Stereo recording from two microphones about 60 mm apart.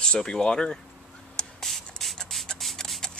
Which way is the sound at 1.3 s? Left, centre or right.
Centre.